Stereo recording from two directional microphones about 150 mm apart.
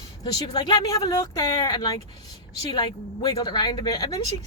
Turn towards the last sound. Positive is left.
turn(degrees=25)  # may be behind; listen again after turning